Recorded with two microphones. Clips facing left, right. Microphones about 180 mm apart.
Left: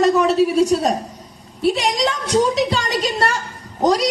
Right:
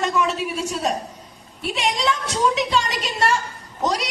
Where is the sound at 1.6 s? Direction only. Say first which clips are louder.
Left 6 dB; 35° left (ahead or behind).